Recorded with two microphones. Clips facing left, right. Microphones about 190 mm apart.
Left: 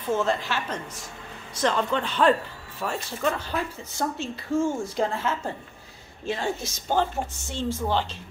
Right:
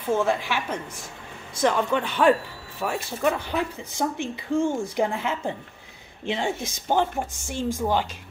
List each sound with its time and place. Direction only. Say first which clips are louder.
0.1 s a woman's voice: right 2 dB; 10° right (ahead or behind)